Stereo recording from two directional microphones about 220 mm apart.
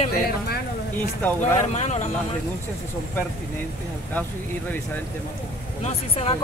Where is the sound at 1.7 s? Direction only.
30° left (ahead or behind).